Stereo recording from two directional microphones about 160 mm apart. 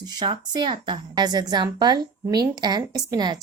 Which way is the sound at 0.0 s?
25° right (ahead or behind).